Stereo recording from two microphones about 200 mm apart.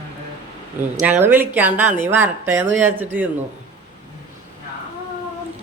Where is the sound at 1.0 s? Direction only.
10° right (ahead or behind).